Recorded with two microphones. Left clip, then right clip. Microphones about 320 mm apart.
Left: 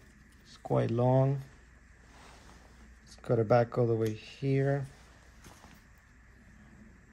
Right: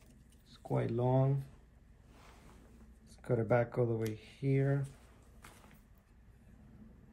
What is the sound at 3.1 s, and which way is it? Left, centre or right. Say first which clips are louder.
Speech: left 6 dB; left.